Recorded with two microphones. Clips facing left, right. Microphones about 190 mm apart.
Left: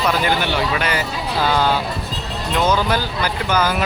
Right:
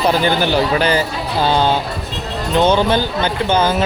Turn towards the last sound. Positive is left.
turn(degrees=-25)  # may be behind; listen again after turning